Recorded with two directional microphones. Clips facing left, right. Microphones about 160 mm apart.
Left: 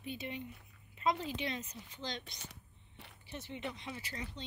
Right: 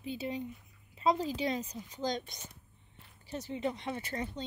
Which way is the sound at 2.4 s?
75° left (ahead or behind).